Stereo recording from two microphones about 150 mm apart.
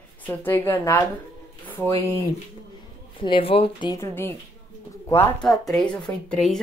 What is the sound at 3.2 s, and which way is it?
Speech, 35° left (ahead or behind).